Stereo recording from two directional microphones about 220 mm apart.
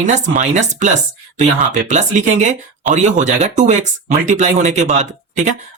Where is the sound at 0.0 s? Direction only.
30° right (ahead or behind).